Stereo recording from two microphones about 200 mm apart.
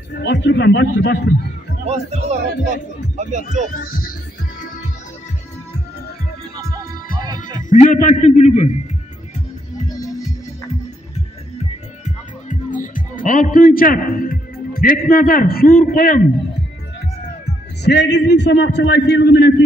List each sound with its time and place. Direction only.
0.1 s a man's voice: 60° left (ahead or behind)
1.9 s speech: 35° right (ahead or behind)
3.7 s speech: 45° left (ahead or behind)
6.5 s music: 20° right (ahead or behind)
7.3 s a man's voice: 40° left (ahead or behind)
12.0 s music: 40° left (ahead or behind)
17.8 s a man's voice: 60° left (ahead or behind)